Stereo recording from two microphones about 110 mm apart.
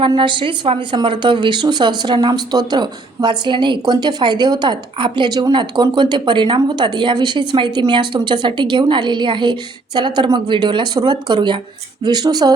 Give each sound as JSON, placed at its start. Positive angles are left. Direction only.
{"t": 0.2, "sound": "speech", "side_deg": -50}